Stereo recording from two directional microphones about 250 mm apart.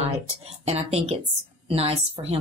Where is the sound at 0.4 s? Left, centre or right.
Right.